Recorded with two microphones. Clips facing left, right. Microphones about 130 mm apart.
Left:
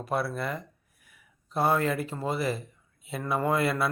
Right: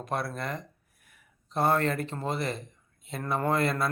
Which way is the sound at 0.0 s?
5° left (ahead or behind).